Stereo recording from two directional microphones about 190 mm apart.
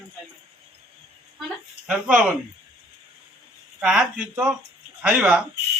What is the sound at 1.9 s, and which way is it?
Speech, 5° right (ahead or behind).